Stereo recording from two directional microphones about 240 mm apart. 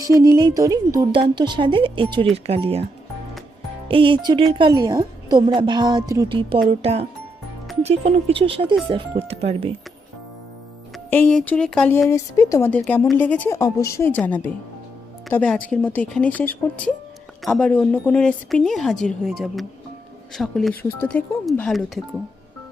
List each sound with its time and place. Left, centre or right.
0.0 s a woman's voice: centre
3.8 s a woman's voice: right
10.9 s a woman's voice: centre